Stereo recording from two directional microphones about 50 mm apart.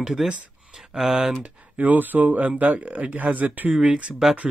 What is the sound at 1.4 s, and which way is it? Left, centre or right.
Speech, right.